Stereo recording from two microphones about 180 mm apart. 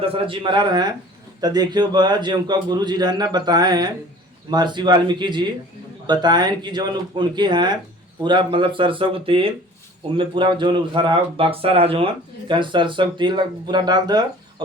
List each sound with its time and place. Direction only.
0.0 s speech: 30° right (ahead or behind)